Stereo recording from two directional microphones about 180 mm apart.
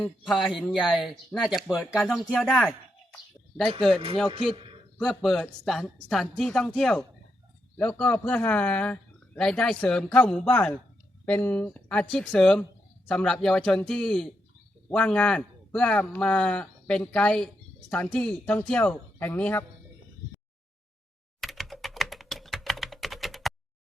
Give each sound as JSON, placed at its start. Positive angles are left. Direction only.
{"t": 0.0, "sound": "a man's voice", "side_deg": 5}
{"t": 4.5, "sound": "a sound", "side_deg": -30}
{"t": 4.9, "sound": "a man's voice", "side_deg": 0}
{"t": 21.4, "sound": "computer keyboard", "side_deg": 0}